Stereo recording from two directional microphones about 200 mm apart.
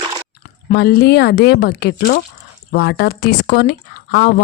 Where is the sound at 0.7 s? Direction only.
50° left (ahead or behind).